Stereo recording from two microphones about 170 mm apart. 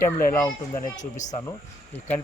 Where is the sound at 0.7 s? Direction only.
45° left (ahead or behind).